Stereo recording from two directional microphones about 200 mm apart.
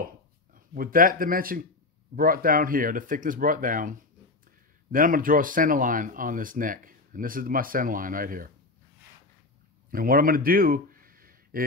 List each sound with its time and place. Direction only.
0.7 s speech: 45° right (ahead or behind)
4.9 s speech: 45° right (ahead or behind)
9.8 s a sound: 45° right (ahead or behind)